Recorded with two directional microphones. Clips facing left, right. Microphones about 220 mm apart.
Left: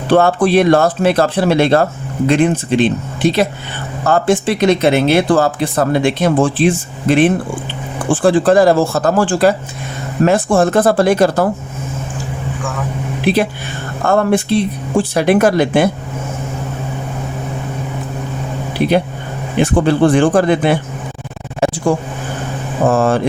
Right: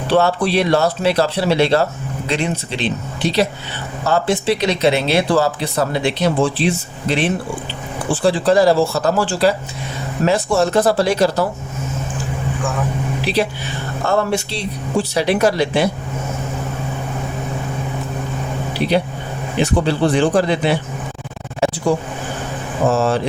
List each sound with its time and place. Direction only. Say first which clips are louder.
0.1 s speech: left 5 dB; 50° left (ahead or behind)
13.2 s speech: left 6 dB; 50° left (ahead or behind)
18.8 s speech: left 4 dB; 50° left (ahead or behind)
21.6 s a sound: left 2 dB; 50° left (ahead or behind)
22.9 s speech: left 4 dB; 50° left (ahead or behind)